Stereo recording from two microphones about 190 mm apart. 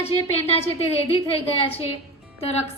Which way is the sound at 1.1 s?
30° left (ahead or behind).